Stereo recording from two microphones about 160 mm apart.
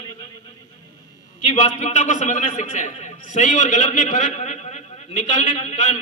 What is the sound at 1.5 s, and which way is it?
A man's voice, 50° left (ahead or behind).